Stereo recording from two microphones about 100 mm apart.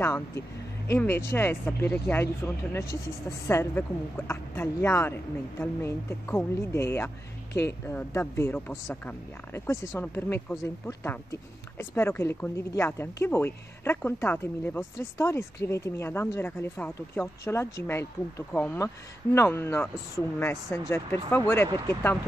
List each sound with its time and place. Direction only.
0.0 s speech: 25° left (ahead or behind)
18.5 s speech: 15° left (ahead or behind)
19.3 s speech: 25° left (ahead or behind)